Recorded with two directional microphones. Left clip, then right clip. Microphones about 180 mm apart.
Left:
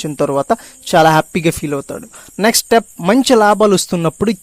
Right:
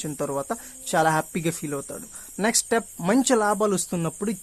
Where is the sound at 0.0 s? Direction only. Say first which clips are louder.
Left 12 dB; 40° left (ahead or behind).